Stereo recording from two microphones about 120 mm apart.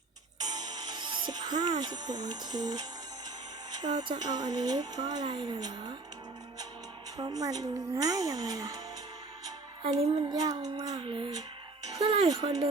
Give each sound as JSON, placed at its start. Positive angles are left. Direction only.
{"t": 0.3, "sound": "music", "side_deg": -30}
{"t": 3.8, "sound": "speech", "side_deg": -35}
{"t": 7.2, "sound": "speech", "side_deg": -30}
{"t": 10.1, "sound": "speech", "side_deg": -35}